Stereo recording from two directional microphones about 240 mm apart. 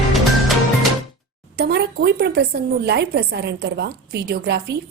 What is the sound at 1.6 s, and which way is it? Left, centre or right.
A woman's voice, right.